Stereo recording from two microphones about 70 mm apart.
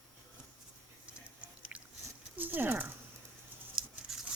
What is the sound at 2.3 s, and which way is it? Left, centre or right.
Speech, right.